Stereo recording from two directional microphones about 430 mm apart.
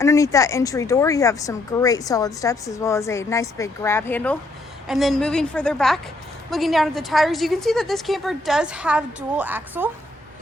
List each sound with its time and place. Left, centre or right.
0.0 s a woman's voice: centre